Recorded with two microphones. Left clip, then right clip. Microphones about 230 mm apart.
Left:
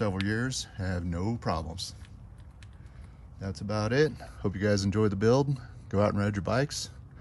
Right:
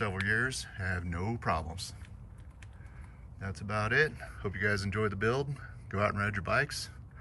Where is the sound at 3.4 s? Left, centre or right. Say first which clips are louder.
Left 2 dB; centre.